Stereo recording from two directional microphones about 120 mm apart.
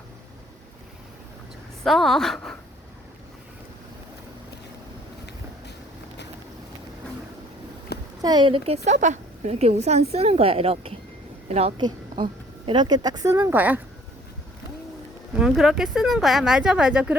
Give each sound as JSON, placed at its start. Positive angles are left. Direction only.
{"t": 1.8, "sound": "speech", "side_deg": 0}
{"t": 8.2, "sound": "a woman's voice", "side_deg": -35}
{"t": 11.4, "sound": "speech", "side_deg": -65}
{"t": 11.8, "sound": "speech", "side_deg": -40}
{"t": 13.5, "sound": "speech", "side_deg": -15}
{"t": 15.4, "sound": "speech", "side_deg": -5}